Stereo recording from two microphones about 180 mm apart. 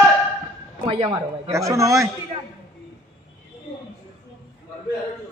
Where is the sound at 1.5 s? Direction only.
15° right (ahead or behind).